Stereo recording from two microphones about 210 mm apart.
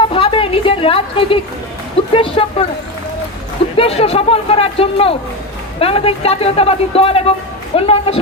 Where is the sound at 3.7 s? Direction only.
30° left (ahead or behind).